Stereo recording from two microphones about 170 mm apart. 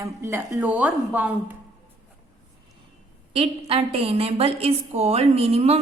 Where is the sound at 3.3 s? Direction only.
35° right (ahead or behind).